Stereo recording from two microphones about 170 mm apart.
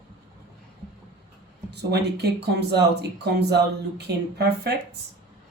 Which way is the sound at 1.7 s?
80° right.